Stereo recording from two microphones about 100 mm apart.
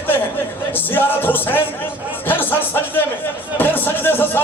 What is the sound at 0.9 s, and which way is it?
A man's voice, 20° left (ahead or behind).